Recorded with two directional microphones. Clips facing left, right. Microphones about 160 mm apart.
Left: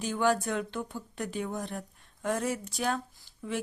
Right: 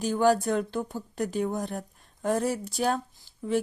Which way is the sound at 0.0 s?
40° right (ahead or behind).